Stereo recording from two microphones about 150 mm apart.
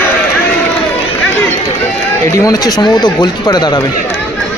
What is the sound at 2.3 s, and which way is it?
Speech, 25° left (ahead or behind).